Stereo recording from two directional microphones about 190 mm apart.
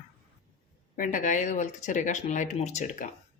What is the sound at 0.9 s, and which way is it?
Speech, 45° left (ahead or behind).